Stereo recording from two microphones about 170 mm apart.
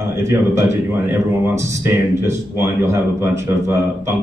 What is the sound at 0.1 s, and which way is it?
Speech, 15° right (ahead or behind).